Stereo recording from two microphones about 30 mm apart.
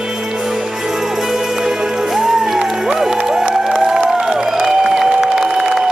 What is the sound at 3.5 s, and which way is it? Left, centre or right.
Crowd, centre.